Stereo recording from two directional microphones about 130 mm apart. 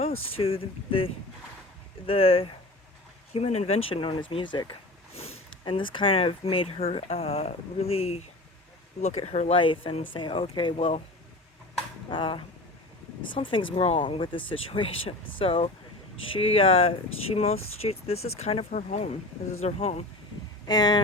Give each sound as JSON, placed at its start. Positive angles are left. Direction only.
{"t": 0.0, "sound": "speech", "side_deg": 45}
{"t": 10.8, "sound": "speech", "side_deg": 50}
{"t": 12.1, "sound": "speech", "side_deg": 40}
{"t": 19.6, "sound": "speech", "side_deg": 55}
{"t": 20.7, "sound": "speech", "side_deg": 30}